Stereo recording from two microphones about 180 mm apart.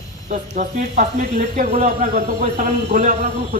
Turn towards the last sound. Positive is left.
turn(degrees=-45)  # may be behind; listen again after turning